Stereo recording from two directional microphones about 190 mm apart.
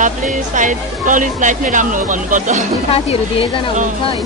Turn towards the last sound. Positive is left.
turn(degrees=30)  # may be behind; listen again after turning